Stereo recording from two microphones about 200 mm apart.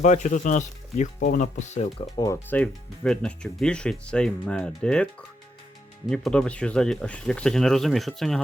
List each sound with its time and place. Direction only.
0.0 s speech: 35° left (ahead or behind)
2.2 s speech: 10° left (ahead or behind)
6.1 s speech: 5° left (ahead or behind)